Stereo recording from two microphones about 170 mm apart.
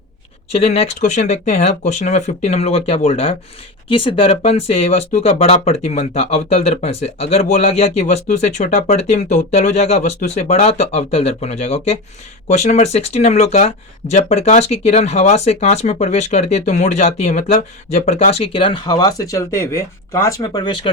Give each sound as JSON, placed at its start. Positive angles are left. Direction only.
{"t": 0.5, "sound": "speech", "side_deg": 35}